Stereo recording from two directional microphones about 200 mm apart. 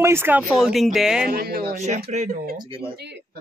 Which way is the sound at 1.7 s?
35° right (ahead or behind).